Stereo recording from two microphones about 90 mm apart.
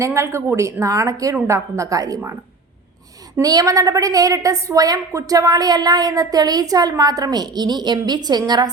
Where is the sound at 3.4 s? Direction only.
40° right (ahead or behind).